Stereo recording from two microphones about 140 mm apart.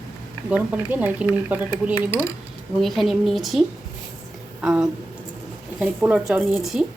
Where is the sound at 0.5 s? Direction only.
10° right (ahead or behind).